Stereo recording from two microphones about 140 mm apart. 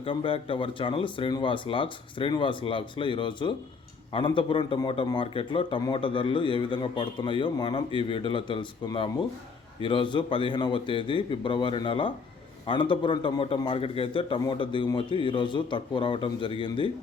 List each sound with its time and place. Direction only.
0.0 s speech: 40° left (ahead or behind)